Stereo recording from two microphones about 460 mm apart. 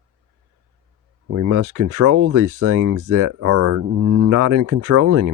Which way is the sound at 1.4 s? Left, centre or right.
Right.